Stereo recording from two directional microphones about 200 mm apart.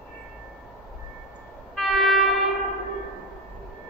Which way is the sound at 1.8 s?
Centre (ahead or behind).